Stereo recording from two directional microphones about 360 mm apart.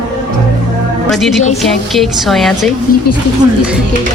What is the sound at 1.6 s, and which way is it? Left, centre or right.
A woman's voice, centre.